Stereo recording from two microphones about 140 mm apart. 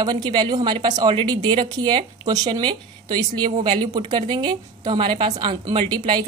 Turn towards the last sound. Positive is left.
turn(degrees=-30)  # may be behind; listen again after turning